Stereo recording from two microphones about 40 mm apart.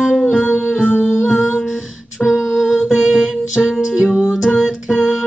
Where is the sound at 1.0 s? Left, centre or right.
Centre.